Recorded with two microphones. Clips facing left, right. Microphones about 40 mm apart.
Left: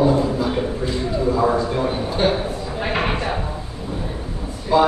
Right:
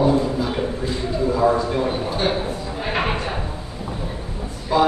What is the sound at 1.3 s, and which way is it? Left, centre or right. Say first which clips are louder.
A man's voice: right 2 dB; centre.